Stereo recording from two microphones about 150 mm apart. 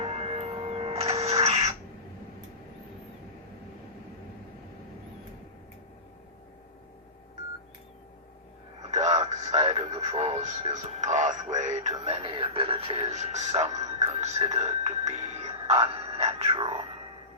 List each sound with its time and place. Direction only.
0.0 s printer: 40° right (ahead or behind)
8.9 s radio: 45° right (ahead or behind)
12.0 s radio: 35° right (ahead or behind)
14.5 s music: 45° right (ahead or behind)